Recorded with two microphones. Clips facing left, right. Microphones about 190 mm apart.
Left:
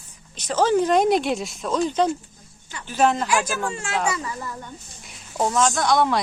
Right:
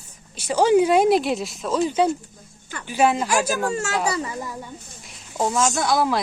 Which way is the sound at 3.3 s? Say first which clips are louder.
Right 2 dB; 40° right (ahead or behind).